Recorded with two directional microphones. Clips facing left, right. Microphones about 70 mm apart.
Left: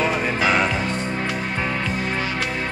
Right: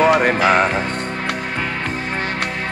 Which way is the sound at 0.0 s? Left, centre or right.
Right.